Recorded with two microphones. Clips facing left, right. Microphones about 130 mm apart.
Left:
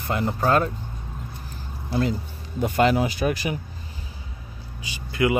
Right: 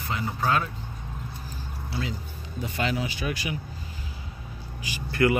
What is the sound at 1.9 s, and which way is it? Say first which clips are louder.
Speech: left 9 dB; 50° left (ahead or behind).